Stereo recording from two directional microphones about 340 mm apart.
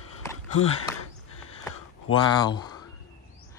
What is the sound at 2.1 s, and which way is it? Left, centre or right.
Speech, centre.